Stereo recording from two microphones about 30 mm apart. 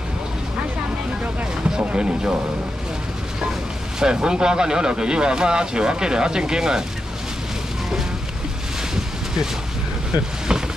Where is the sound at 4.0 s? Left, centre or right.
Right.